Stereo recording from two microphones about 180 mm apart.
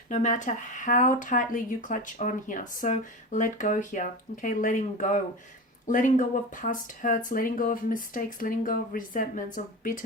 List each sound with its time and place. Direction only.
0.1 s speech: 40° left (ahead or behind)